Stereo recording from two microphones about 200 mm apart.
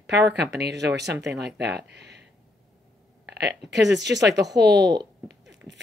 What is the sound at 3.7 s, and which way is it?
Speech, 60° right (ahead or behind).